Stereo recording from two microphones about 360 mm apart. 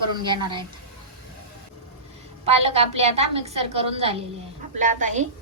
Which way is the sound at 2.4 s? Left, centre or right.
Centre.